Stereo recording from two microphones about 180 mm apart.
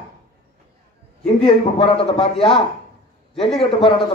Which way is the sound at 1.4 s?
30° left (ahead or behind).